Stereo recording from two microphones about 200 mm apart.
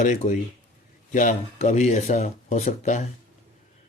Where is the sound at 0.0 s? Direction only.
35° left (ahead or behind).